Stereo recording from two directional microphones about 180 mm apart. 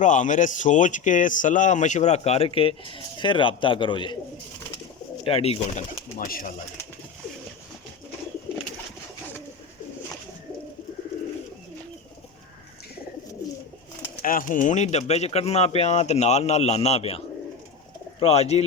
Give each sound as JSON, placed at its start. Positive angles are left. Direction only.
{"t": 0.0, "sound": "a man's voice", "side_deg": 45}
{"t": 5.2, "sound": "a man's voice", "side_deg": 30}
{"t": 6.1, "sound": "speech", "side_deg": 50}
{"t": 14.2, "sound": "a man's voice", "side_deg": 50}